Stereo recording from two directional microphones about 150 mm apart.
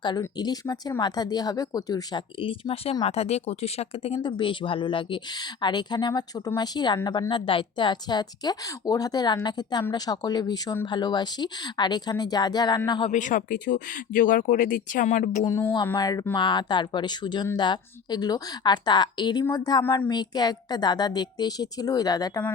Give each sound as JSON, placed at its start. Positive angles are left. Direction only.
{"t": 0.2, "sound": "speech", "side_deg": 25}
{"t": 13.1, "sound": "speech", "side_deg": 55}
{"t": 15.4, "sound": "a sound", "side_deg": 20}
{"t": 16.0, "sound": "speech", "side_deg": 25}